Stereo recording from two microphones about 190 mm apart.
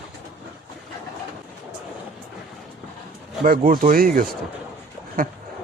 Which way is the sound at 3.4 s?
50° right (ahead or behind).